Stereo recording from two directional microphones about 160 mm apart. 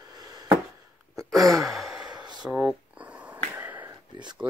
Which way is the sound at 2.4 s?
5° right (ahead or behind).